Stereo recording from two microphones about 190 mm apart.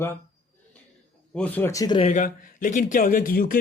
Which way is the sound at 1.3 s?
10° left (ahead or behind).